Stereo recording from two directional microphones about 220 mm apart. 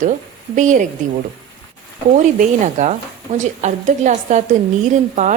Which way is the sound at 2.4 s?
35° right (ahead or behind).